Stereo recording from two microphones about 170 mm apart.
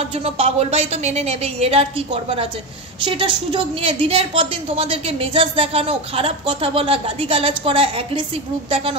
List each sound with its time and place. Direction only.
0.2 s a woman's voice: 35° right (ahead or behind)